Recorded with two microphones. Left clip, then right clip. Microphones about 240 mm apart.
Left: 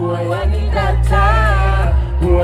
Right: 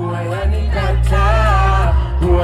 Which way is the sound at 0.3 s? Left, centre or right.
Centre.